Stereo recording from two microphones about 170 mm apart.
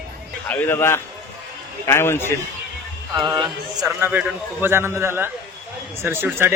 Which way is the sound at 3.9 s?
10° right (ahead or behind).